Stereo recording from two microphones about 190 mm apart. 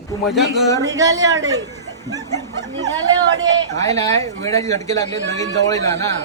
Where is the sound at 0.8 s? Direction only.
20° right (ahead or behind).